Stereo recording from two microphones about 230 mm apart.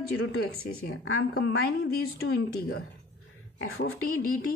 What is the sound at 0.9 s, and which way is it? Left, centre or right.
Speech, left.